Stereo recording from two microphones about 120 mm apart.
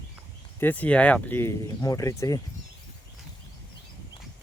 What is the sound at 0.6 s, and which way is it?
Speech, 15° left (ahead or behind).